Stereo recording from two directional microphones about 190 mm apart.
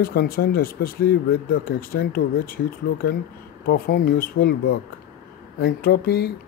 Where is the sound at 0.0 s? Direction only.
55° left (ahead or behind).